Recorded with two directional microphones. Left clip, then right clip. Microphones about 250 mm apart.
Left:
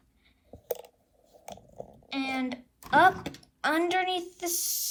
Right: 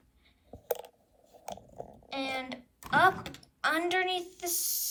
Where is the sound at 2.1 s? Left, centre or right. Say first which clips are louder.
Left 3 dB; centre.